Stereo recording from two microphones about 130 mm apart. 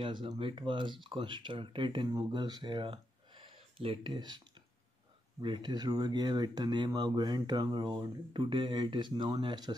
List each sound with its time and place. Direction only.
0.0 s speech: 40° right (ahead or behind)
5.4 s speech: 35° right (ahead or behind)